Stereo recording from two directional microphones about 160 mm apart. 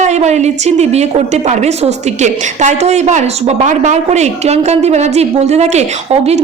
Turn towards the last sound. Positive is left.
turn(degrees=-45)  # may be behind; listen again after turning